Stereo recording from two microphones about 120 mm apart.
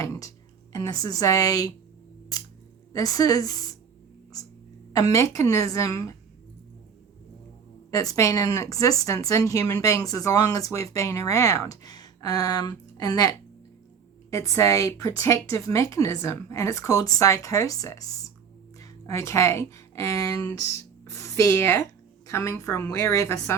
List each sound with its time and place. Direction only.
0.0 s a woman's voice: 25° left (ahead or behind)
2.9 s a woman's voice: 30° left (ahead or behind)
4.9 s speech: 30° left (ahead or behind)
7.9 s speech: 25° left (ahead or behind)